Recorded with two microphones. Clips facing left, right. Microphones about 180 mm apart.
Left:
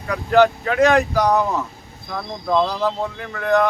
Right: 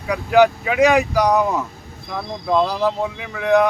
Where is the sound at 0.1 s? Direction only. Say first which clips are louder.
Right 1 dB; 10° right (ahead or behind).